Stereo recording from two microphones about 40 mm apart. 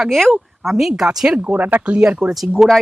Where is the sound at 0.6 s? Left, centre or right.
Centre.